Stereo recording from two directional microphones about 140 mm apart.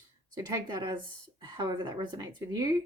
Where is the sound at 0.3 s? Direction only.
30° right (ahead or behind).